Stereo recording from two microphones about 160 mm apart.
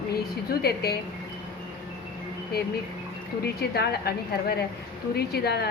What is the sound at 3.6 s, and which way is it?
A woman's voice, 90° left.